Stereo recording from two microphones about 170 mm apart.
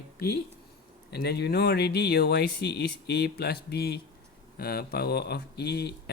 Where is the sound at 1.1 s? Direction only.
75° left (ahead or behind).